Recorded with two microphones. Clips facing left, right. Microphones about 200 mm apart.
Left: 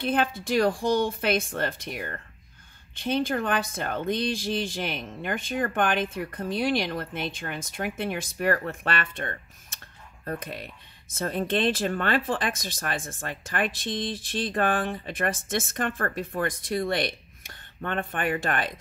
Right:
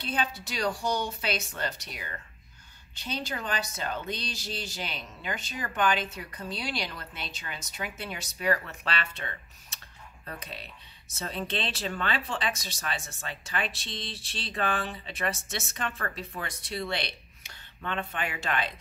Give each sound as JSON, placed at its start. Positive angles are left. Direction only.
{"t": 0.0, "sound": "speech", "side_deg": 50}